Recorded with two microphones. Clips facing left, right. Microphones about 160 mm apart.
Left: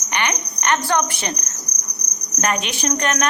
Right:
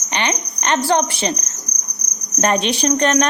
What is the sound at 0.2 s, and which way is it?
Speech, 25° right (ahead or behind).